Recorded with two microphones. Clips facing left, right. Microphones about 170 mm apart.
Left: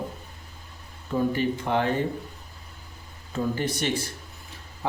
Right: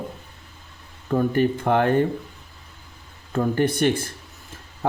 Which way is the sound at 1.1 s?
55° right (ahead or behind).